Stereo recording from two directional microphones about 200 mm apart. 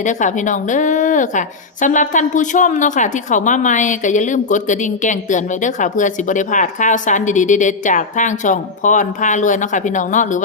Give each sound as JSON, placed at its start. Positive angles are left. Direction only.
{"t": 0.0, "sound": "a woman's voice", "side_deg": 40}